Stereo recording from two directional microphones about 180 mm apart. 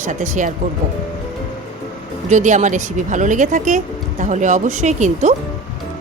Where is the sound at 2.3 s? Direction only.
40° right (ahead or behind).